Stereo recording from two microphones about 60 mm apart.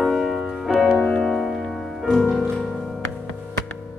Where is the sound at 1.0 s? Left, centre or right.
Centre.